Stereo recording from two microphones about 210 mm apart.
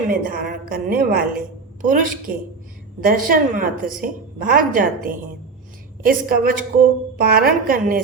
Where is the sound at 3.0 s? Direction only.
40° right (ahead or behind).